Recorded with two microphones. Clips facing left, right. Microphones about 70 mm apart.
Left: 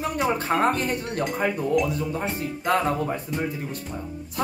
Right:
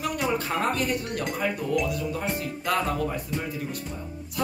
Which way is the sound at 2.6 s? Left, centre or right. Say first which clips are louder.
Left 4 dB; left.